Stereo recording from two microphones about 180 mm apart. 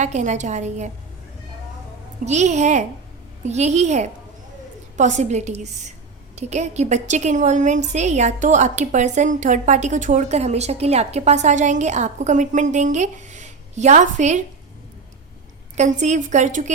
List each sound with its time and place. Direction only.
0.0 s a woman's voice: 40° right (ahead or behind)
2.2 s a woman's voice: 40° right (ahead or behind)
15.8 s a woman's voice: 40° right (ahead or behind)